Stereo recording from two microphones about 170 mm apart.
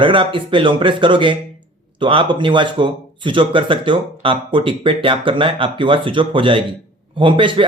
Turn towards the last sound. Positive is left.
turn(degrees=-30)  # may be behind; listen again after turning